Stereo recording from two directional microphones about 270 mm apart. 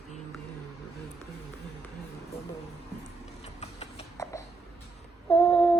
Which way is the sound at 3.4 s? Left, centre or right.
Left.